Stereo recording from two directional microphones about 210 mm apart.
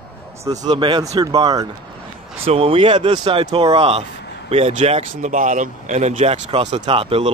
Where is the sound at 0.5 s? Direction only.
20° right (ahead or behind).